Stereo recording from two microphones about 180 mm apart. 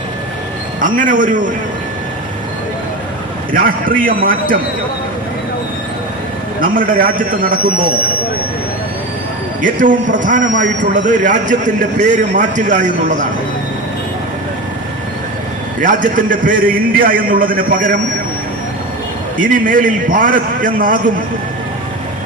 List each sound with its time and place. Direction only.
0.8 s a man's voice: 50° right (ahead or behind)
3.5 s a man's voice: 50° right (ahead or behind)
6.6 s a man's voice: 50° right (ahead or behind)
9.6 s a man's voice: 45° right (ahead or behind)
15.8 s a man's voice: 50° right (ahead or behind)
19.4 s a man's voice: 50° right (ahead or behind)